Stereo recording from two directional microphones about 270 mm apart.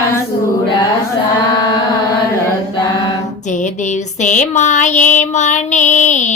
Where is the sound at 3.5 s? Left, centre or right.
Left.